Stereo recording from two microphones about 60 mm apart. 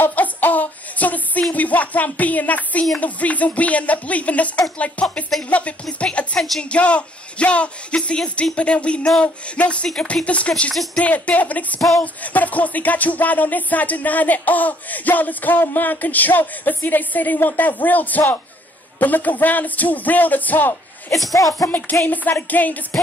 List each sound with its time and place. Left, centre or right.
0.0 s music: left
1.5 s speech: left
3.0 s music: left
21.3 s speech: left
21.6 s music: left